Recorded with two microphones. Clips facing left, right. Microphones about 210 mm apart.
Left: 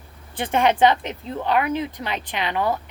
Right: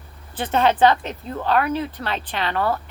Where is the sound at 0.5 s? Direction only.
15° left (ahead or behind).